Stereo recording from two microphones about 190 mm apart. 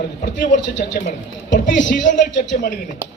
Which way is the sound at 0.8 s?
60° left (ahead or behind).